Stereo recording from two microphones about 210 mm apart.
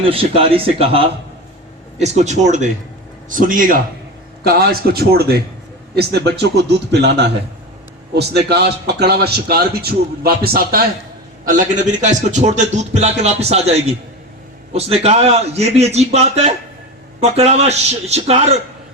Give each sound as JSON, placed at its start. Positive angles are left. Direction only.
{"t": 0.0, "sound": "a man's voice", "side_deg": -25}
{"t": 8.1, "sound": "a man's voice", "side_deg": -50}